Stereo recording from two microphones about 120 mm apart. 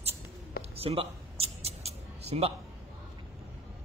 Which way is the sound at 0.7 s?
55° right (ahead or behind).